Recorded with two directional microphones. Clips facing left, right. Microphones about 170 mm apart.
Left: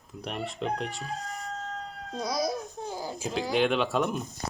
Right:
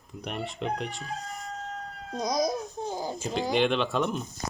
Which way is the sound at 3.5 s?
5° left (ahead or behind).